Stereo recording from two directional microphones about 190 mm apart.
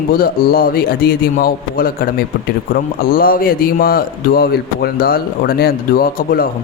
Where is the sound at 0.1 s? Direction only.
50° left (ahead or behind).